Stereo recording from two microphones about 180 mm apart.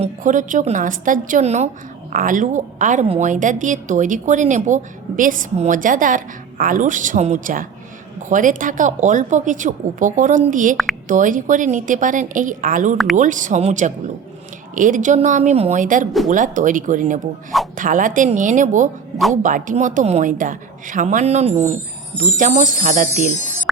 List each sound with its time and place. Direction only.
0.0 s a woman's voice: 45° right (ahead or behind)